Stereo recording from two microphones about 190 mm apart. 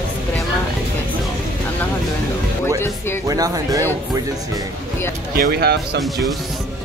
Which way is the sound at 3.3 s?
20° right (ahead or behind).